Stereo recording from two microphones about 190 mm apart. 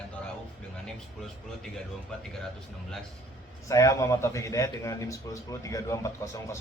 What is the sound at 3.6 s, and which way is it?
Speech, 15° left (ahead or behind).